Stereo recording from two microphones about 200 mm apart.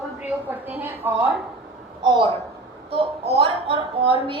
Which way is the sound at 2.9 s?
30° right (ahead or behind).